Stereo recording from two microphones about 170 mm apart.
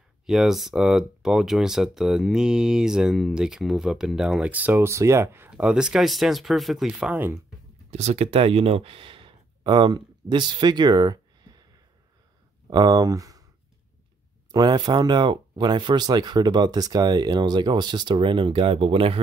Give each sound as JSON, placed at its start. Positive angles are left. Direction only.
{"t": 0.3, "sound": "speech", "side_deg": 0}
{"t": 7.9, "sound": "speech", "side_deg": -40}
{"t": 12.6, "sound": "speech", "side_deg": -25}
{"t": 14.5, "sound": "speech", "side_deg": -25}